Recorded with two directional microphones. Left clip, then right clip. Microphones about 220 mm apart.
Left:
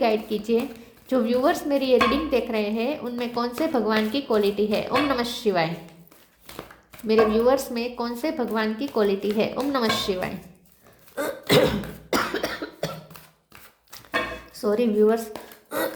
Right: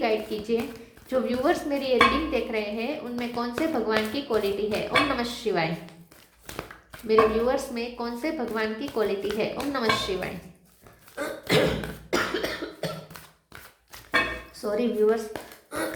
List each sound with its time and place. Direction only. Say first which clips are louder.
0.0 s dishes: left 3 dB; 45° left (ahead or behind)
7.1 s dishes: left 2 dB; 45° left (ahead or behind)
11.1 s cough: left 4 dB; 40° left (ahead or behind)
14.5 s a woman's voice: left 7 dB; 40° left (ahead or behind)
15.7 s a sound: left 4 dB; 45° left (ahead or behind)